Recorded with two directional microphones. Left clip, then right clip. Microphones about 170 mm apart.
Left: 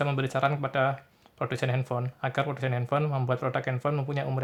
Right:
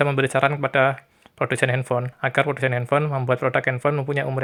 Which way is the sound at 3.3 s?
25° right (ahead or behind).